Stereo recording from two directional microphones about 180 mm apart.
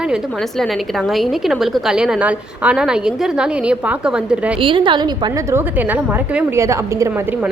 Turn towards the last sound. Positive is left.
turn(degrees=-10)  # may be behind; listen again after turning